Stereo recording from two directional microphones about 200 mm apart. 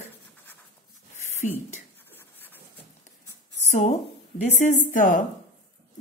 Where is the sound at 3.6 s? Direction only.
35° left (ahead or behind).